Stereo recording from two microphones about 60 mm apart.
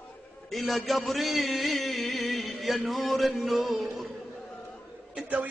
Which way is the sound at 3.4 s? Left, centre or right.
Centre.